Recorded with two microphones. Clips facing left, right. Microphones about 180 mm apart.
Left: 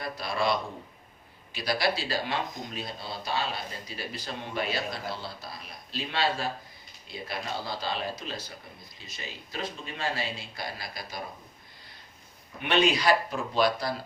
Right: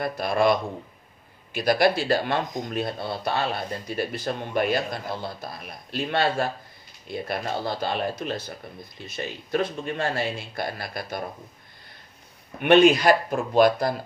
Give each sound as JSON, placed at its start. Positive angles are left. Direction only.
{"t": 0.0, "sound": "speech", "side_deg": -50}
{"t": 12.6, "sound": "speech", "side_deg": -50}